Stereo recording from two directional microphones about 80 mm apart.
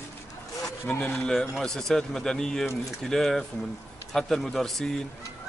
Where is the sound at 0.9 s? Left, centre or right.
Centre.